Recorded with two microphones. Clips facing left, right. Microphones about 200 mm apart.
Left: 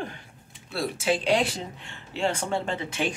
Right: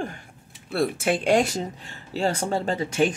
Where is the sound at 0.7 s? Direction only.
55° right (ahead or behind).